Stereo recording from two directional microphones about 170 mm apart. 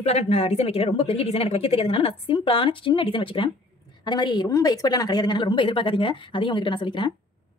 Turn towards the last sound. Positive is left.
turn(degrees=30)  # may be behind; listen again after turning